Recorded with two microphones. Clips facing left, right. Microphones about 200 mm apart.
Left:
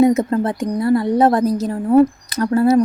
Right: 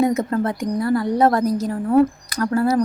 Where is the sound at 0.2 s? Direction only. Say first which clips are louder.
Left 3 dB; 25° left (ahead or behind).